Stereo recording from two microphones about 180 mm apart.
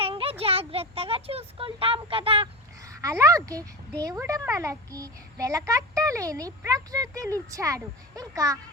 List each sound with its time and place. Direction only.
0.0 s speech: 30° right (ahead or behind)
2.8 s a child's voice: 15° right (ahead or behind)